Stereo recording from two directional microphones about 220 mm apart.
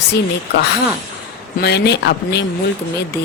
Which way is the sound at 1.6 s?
50° left (ahead or behind).